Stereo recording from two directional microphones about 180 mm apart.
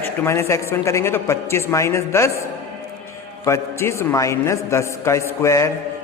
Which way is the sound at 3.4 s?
15° left (ahead or behind).